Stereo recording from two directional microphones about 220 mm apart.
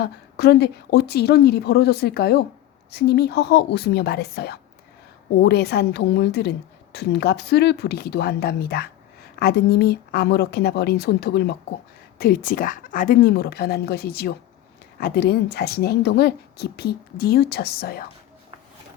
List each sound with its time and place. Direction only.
0.0 s speech: 45° left (ahead or behind)